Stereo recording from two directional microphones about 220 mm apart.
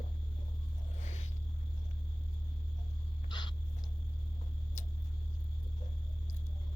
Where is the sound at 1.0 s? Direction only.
30° left (ahead or behind).